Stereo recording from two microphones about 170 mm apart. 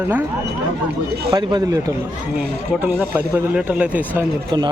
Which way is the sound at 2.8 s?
10° right (ahead or behind).